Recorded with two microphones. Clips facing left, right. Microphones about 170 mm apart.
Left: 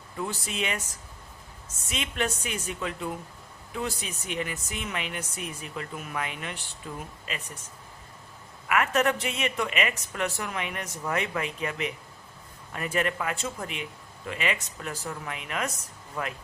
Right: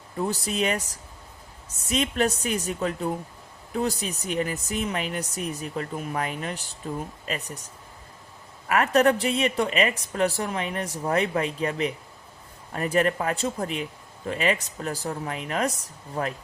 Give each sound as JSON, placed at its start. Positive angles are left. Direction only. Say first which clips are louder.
{"t": 0.2, "sound": "speech", "louder": "right 6 dB", "side_deg": -40}
{"t": 8.6, "sound": "speech", "louder": "right 5 dB", "side_deg": -35}